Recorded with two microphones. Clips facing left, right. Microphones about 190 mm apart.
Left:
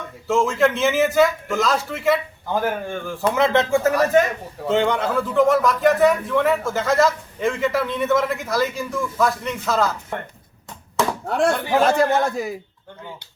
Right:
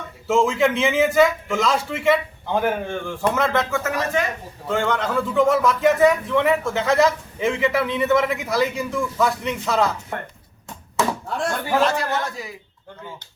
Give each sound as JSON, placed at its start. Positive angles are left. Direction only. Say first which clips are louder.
{"t": 0.3, "sound": "a man's voice", "louder": "even", "side_deg": 0}
{"t": 3.5, "sound": "a man's voice", "louder": "left 5 dB", "side_deg": 30}
{"t": 4.9, "sound": "a man's voice", "louder": "left 1 dB", "side_deg": 5}
{"t": 11.3, "sound": "speech", "louder": "left 6 dB", "side_deg": 65}
{"t": 11.8, "sound": "speech", "louder": "left 6 dB", "side_deg": 45}